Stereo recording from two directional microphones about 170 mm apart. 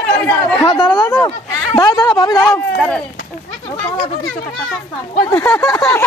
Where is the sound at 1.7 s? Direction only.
20° left (ahead or behind).